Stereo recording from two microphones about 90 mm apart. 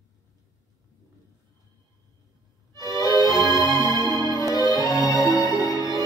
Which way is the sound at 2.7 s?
50° right (ahead or behind).